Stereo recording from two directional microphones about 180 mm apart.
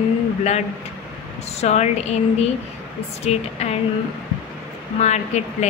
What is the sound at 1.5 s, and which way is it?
Speech, 40° left (ahead or behind).